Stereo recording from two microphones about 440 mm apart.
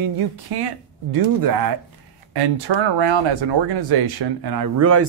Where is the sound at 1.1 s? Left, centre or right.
Right.